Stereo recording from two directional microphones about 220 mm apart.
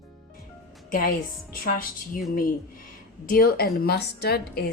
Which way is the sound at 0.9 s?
40° left (ahead or behind).